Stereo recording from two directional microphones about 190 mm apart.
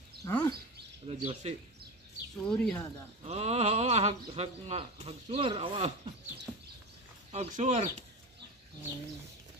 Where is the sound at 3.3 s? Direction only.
35° right (ahead or behind).